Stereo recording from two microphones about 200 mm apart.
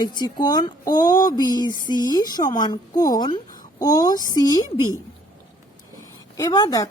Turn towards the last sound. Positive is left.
turn(degrees=20)  # may be behind; listen again after turning